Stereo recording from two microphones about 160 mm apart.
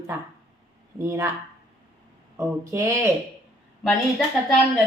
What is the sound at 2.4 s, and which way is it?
Speech, 15° right (ahead or behind).